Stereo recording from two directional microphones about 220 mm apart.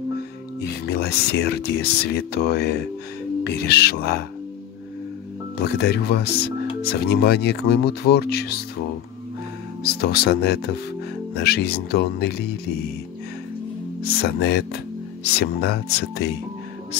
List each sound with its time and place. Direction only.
0.6 s speech: 45° left (ahead or behind)
5.6 s speech: 45° left (ahead or behind)
9.8 s speech: 45° left (ahead or behind)
14.2 s speech: 45° left (ahead or behind)